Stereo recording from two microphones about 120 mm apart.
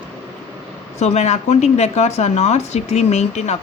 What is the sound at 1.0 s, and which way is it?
Speech, 70° left (ahead or behind).